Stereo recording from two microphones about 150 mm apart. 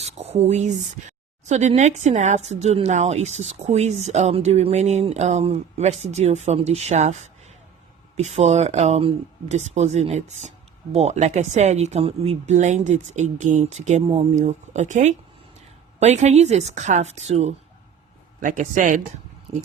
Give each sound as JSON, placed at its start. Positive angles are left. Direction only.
{"t": 0.0, "sound": "speech", "side_deg": -45}
{"t": 18.3, "sound": "a man's voice", "side_deg": -60}
{"t": 19.5, "sound": "speech", "side_deg": -40}